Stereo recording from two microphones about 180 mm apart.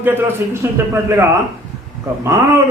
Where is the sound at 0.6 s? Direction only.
15° right (ahead or behind).